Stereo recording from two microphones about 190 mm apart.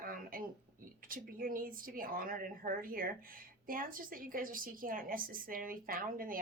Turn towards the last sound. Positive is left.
turn(degrees=-50)  # may be behind; listen again after turning